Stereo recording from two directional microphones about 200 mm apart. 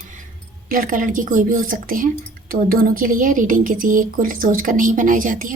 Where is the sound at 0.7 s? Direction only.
45° right (ahead or behind).